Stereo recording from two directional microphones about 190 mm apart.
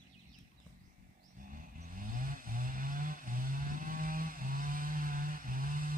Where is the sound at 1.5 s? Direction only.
45° right (ahead or behind).